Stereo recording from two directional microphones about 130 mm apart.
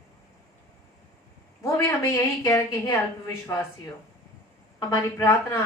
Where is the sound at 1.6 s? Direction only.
20° left (ahead or behind).